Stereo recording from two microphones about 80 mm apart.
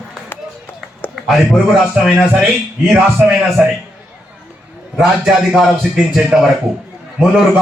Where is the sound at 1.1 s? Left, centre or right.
Centre.